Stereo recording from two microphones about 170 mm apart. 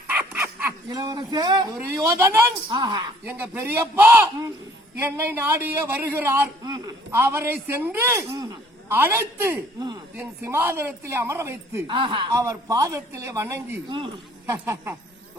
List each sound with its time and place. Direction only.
0.1 s dog: 10° right (ahead or behind)
0.9 s a man's voice: 25° right (ahead or behind)
3.2 s speech: 10° right (ahead or behind)
11.9 s a man's voice: 30° right (ahead or behind)
12.3 s a man's voice: 20° right (ahead or behind)